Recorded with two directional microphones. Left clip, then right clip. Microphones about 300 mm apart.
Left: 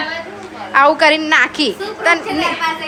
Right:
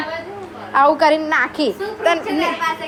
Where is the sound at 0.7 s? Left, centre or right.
Centre.